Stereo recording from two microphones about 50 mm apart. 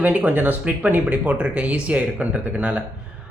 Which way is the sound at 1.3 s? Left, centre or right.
Right.